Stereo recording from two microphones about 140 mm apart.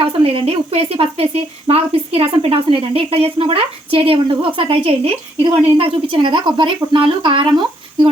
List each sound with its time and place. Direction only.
0.0 s a woman's voice: 40° right (ahead or behind)